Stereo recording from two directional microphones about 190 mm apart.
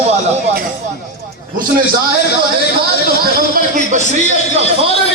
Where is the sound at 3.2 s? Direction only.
40° right (ahead or behind).